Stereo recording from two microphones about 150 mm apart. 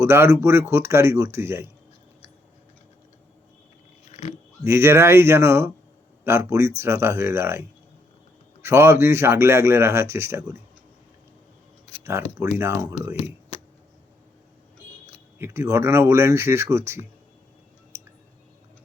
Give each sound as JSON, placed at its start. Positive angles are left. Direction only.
{"t": 0.0, "sound": "a man's voice", "side_deg": -15}
{"t": 4.1, "sound": "dog", "side_deg": 50}
{"t": 4.6, "sound": "a man's voice", "side_deg": -15}
{"t": 8.6, "sound": "a man's voice", "side_deg": -15}
{"t": 11.9, "sound": "a sound", "side_deg": 45}
{"t": 12.5, "sound": "a man's voice", "side_deg": -15}
{"t": 13.1, "sound": "a sound", "side_deg": 40}
{"t": 15.4, "sound": "a man's voice", "side_deg": -20}
{"t": 17.9, "sound": "a sound", "side_deg": -15}